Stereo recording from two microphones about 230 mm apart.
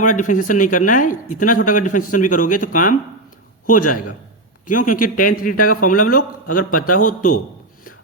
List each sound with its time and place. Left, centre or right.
0.0 s a man's voice: left
4.6 s a man's voice: left